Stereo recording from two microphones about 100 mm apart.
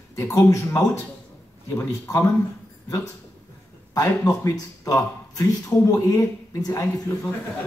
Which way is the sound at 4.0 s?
35° left (ahead or behind).